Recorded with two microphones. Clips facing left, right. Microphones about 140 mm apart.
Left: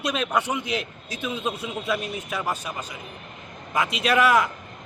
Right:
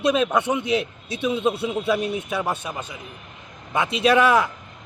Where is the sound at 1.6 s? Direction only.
30° right (ahead or behind).